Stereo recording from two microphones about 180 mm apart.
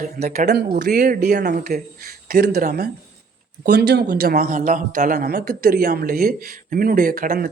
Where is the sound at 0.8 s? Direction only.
55° right (ahead or behind).